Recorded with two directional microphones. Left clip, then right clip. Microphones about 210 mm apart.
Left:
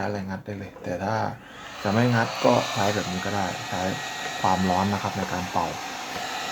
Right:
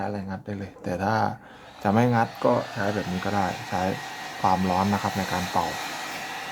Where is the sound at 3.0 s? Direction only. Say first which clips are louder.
Left 2 dB; 10° left (ahead or behind).